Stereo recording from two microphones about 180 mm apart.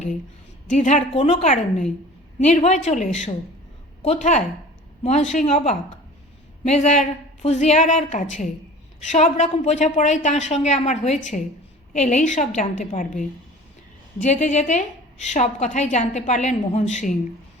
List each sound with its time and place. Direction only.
0.7 s a woman's voice: 40° left (ahead or behind)